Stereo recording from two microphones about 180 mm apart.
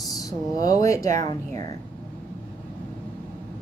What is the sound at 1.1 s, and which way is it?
Speech, 45° right (ahead or behind).